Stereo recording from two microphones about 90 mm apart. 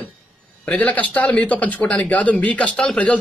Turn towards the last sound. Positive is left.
turn(degrees=10)  # may be behind; listen again after turning